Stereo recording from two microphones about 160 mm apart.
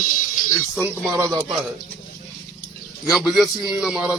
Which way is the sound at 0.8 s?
10° right (ahead or behind).